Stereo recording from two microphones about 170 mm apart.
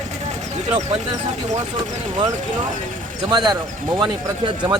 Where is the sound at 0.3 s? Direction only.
40° right (ahead or behind).